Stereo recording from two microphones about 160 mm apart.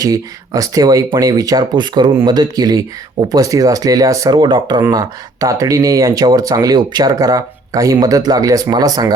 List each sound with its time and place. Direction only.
0.0 s speech: 20° right (ahead or behind)